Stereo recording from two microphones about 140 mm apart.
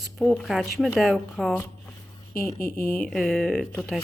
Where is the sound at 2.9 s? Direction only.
5° left (ahead or behind).